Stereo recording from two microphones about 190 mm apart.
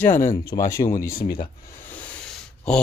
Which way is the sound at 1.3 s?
25° left (ahead or behind).